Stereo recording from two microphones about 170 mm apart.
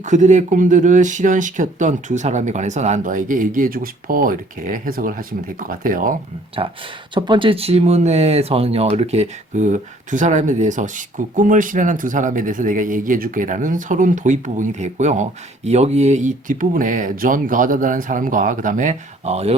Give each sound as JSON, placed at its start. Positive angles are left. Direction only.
{"t": 0.0, "sound": "speech", "side_deg": -45}
{"t": 7.1, "sound": "speech", "side_deg": -30}